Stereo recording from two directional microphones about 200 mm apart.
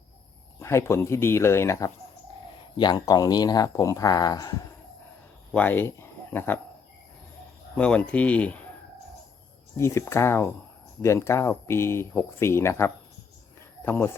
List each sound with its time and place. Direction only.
0.6 s speech: 15° left (ahead or behind)
5.5 s speech: 10° left (ahead or behind)
7.8 s speech: 5° left (ahead or behind)
9.7 s speech: 15° left (ahead or behind)